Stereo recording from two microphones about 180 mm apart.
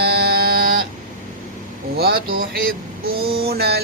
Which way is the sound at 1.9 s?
60° right (ahead or behind).